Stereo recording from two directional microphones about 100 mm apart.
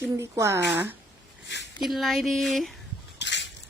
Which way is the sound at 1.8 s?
Centre (ahead or behind).